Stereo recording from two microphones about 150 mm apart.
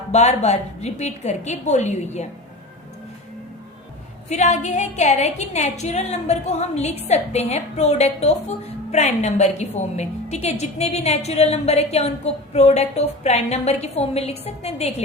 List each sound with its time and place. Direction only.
0.1 s a woman's voice: 50° left (ahead or behind)
4.3 s a woman's voice: 50° left (ahead or behind)